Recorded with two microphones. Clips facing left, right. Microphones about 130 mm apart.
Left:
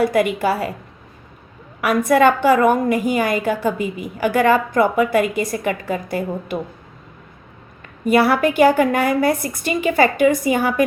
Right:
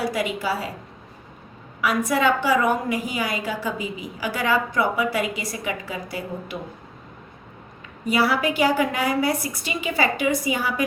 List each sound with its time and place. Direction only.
0.0 s a woman's voice: 55° left (ahead or behind)
1.8 s a woman's voice: 55° left (ahead or behind)
8.0 s a woman's voice: 55° left (ahead or behind)